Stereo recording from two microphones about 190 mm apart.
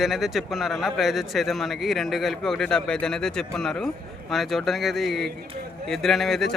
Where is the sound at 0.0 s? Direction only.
Centre (ahead or behind).